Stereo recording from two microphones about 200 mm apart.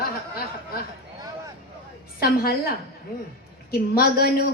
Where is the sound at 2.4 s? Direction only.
50° left (ahead or behind).